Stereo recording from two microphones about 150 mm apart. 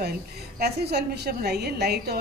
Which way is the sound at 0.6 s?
90° right.